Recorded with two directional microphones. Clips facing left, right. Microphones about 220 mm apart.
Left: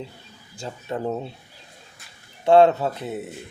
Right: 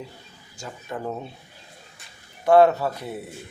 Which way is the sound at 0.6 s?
25° left (ahead or behind).